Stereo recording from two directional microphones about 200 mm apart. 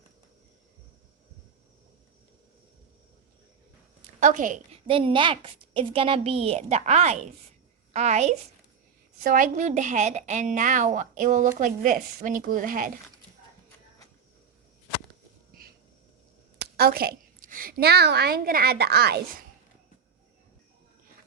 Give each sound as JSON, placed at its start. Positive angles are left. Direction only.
{"t": 4.2, "sound": "a woman's voice", "side_deg": -40}
{"t": 16.7, "sound": "a woman's voice", "side_deg": -50}